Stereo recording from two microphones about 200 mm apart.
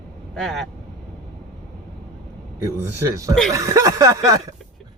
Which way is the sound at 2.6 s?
15° right (ahead or behind).